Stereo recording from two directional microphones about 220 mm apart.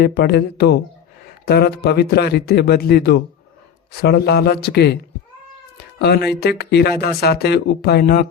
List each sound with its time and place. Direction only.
0.0 s speech: 45° left (ahead or behind)
5.7 s cat: 45° left (ahead or behind)
6.4 s speech: 45° left (ahead or behind)